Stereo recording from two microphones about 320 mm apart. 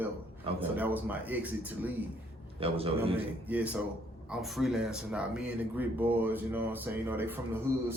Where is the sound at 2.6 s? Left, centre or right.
Centre.